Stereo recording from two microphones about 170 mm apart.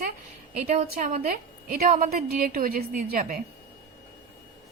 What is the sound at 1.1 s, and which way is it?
A woman's voice, 55° right (ahead or behind).